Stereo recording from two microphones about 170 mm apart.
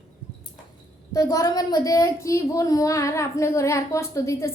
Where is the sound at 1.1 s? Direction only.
20° left (ahead or behind).